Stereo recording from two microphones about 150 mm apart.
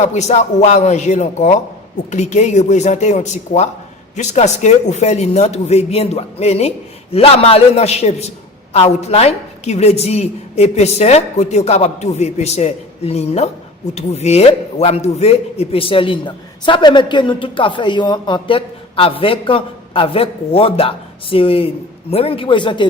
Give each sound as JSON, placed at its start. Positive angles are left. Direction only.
{"t": 0.0, "sound": "a woman's voice", "side_deg": 50}